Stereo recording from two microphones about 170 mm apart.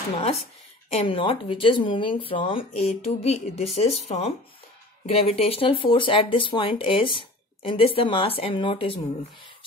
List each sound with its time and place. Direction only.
0.9 s speech: 30° left (ahead or behind)